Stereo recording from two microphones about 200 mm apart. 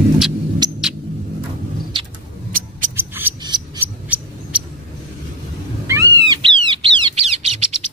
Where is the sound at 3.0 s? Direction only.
10° right (ahead or behind).